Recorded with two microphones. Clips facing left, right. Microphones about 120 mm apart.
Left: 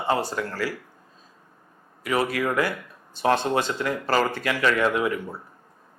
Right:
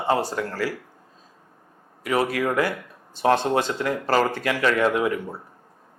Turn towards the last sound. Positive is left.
turn(degrees=-45)  # may be behind; listen again after turning